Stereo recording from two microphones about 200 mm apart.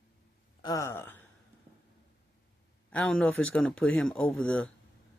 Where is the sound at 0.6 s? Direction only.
15° left (ahead or behind).